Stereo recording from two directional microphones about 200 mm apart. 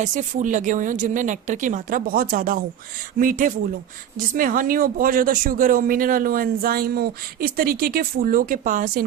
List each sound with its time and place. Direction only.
0.0 s speech: 40° right (ahead or behind)